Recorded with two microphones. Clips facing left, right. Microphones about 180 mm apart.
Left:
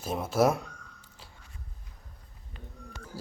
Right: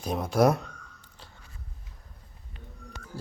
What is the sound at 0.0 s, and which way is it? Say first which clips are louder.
Speech: right 2 dB; 5° left (ahead or behind).